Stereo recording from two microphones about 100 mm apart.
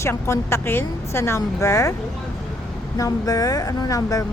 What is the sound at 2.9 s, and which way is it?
A woman's voice, 35° left (ahead or behind).